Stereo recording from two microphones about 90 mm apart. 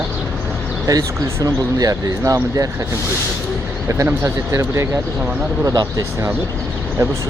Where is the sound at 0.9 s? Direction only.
40° right (ahead or behind).